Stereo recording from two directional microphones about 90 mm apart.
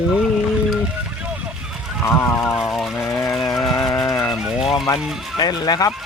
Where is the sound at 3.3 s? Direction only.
Centre (ahead or behind).